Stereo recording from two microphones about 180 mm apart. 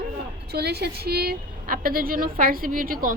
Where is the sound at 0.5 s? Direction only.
60° right (ahead or behind).